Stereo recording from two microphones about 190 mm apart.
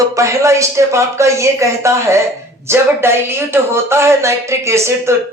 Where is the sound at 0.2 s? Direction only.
15° right (ahead or behind).